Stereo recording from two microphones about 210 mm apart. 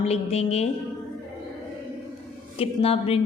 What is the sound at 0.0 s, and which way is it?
Speech, 30° left (ahead or behind).